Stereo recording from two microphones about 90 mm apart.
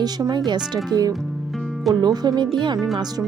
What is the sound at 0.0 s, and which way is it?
Speech, 50° right (ahead or behind).